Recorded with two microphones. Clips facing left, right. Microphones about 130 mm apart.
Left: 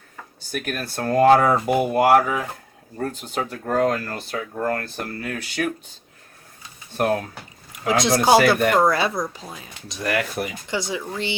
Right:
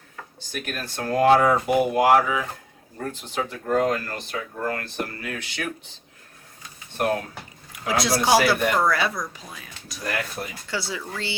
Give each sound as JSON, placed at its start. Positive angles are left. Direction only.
{"t": 0.5, "sound": "speech", "side_deg": 45}
{"t": 7.9, "sound": "speech", "side_deg": 25}
{"t": 8.4, "sound": "speech", "side_deg": 50}
{"t": 8.8, "sound": "speech", "side_deg": 25}
{"t": 10.0, "sound": "speech", "side_deg": 80}
{"t": 10.7, "sound": "speech", "side_deg": 20}